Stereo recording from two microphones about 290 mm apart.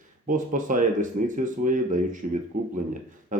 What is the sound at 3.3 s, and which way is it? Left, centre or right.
Speech, right.